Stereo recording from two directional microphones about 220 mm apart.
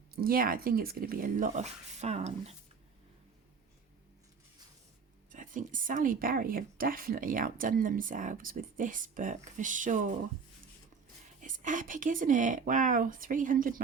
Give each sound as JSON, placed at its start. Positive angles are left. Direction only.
{"t": 0.2, "sound": "speech", "side_deg": -40}
{"t": 5.3, "sound": "speech", "side_deg": -35}
{"t": 11.3, "sound": "speech", "side_deg": -35}